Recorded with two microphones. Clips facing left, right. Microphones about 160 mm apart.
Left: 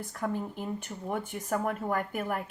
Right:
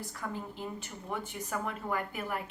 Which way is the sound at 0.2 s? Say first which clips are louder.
Left 7 dB; 50° left (ahead or behind).